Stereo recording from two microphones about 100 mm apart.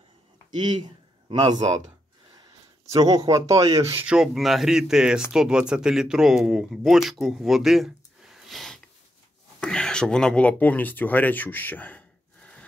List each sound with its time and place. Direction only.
0.6 s a man's voice: 45° right (ahead or behind)
2.9 s speech: 35° right (ahead or behind)
4.0 s speech: 5° right (ahead or behind); by 12.0 s 15° left (ahead or behind)